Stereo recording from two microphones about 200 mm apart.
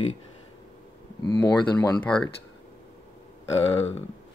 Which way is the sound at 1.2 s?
20° left (ahead or behind).